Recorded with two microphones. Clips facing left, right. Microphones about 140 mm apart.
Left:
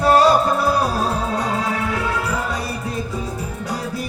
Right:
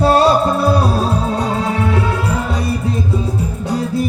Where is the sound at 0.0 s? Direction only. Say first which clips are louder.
Right 2 dB; 30° right (ahead or behind).